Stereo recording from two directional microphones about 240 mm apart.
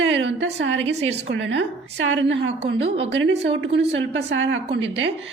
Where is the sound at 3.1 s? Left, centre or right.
Right.